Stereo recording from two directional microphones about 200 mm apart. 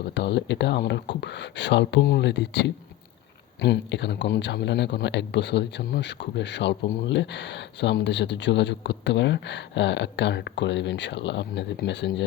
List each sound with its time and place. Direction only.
0.0 s speech: 60° left (ahead or behind)